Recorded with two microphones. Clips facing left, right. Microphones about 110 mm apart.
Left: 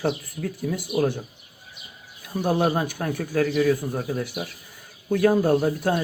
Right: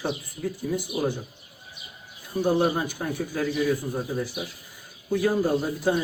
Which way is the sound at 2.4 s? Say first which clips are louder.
Left 1 dB; 65° left (ahead or behind).